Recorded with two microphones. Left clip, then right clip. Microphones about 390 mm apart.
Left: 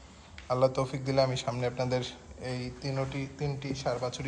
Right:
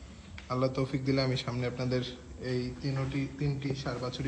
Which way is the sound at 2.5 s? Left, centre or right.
Left.